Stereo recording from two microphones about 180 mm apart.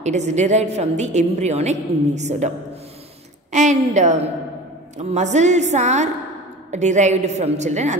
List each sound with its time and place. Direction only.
0.0 s a woman's voice: 40° right (ahead or behind)
3.5 s a woman's voice: 40° right (ahead or behind)